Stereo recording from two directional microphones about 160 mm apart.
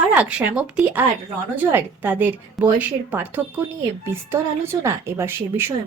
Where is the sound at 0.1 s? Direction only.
10° right (ahead or behind).